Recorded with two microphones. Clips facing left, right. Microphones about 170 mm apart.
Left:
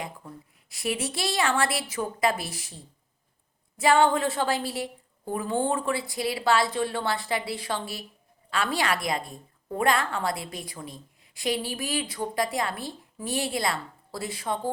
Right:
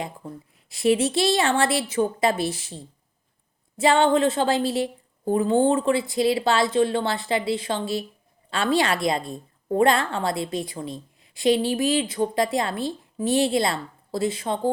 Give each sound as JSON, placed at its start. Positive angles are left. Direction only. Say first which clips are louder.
{"t": 0.7, "sound": "a woman's voice", "louder": "right 10 dB", "side_deg": -25}